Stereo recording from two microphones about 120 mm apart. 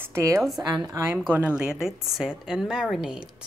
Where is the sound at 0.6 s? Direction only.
35° right (ahead or behind).